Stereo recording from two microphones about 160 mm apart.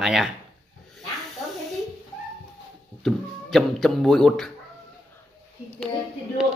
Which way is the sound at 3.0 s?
Centre (ahead or behind).